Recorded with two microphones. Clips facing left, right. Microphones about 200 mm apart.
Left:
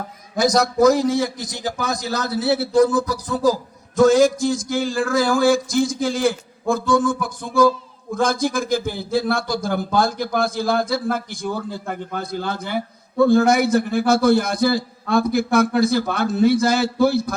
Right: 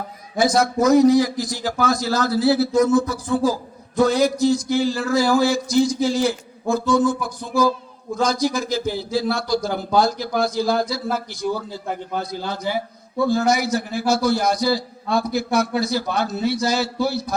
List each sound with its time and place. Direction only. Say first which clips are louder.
0.3 s a man's voice: left 1 dB; 40° left (ahead or behind)